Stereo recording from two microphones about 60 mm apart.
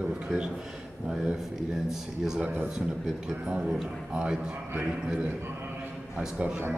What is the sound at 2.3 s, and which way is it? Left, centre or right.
A man's voice, right.